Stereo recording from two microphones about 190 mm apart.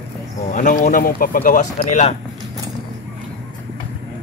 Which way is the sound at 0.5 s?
40° left (ahead or behind).